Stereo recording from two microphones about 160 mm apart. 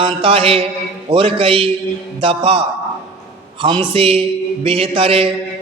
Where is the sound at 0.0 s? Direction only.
35° right (ahead or behind).